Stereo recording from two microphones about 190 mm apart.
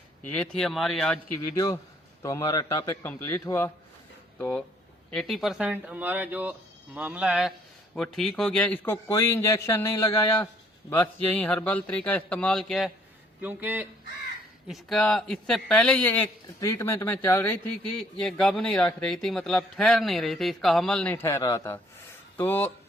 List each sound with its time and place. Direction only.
0.3 s speech: 5° left (ahead or behind)
1.4 s a man's voice: 20° left (ahead or behind); by 12.9 s centre (ahead or behind)
13.4 s a man's voice: 10° right (ahead or behind)
14.7 s a man's voice: centre (ahead or behind)